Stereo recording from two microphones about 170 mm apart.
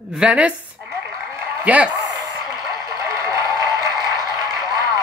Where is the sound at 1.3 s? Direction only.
10° right (ahead or behind).